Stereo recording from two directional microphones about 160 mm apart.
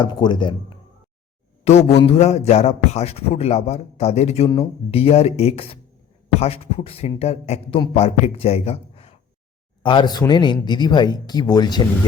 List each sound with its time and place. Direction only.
0.0 s speech: 25° left (ahead or behind)
1.6 s a man's voice: 40° left (ahead or behind); by 11.8 s 25° left (ahead or behind)